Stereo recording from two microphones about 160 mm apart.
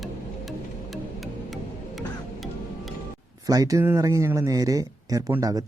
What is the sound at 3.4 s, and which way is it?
Speech, 20° right (ahead or behind).